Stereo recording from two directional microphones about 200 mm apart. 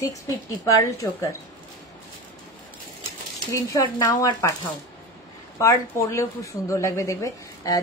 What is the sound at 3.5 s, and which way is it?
Speech, 15° left (ahead or behind).